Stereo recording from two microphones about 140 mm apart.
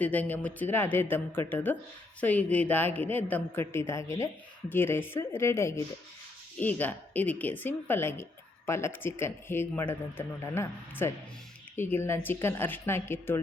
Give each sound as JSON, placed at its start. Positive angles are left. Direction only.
{"t": 0.0, "sound": "a woman's voice", "side_deg": 10}